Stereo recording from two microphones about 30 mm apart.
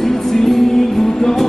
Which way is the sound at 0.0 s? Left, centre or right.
Centre.